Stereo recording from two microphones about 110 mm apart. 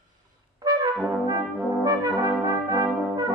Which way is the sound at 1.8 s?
35° right (ahead or behind).